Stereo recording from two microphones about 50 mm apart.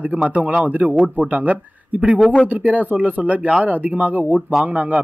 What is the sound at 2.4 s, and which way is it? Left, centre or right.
Speech, right.